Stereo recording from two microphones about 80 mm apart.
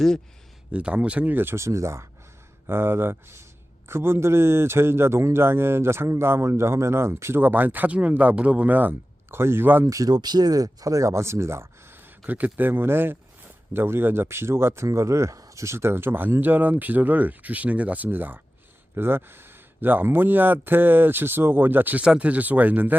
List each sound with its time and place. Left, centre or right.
0.7 s a man's voice: centre
9.8 s speech: right
10.2 s a man's voice: right
22.0 s speech: centre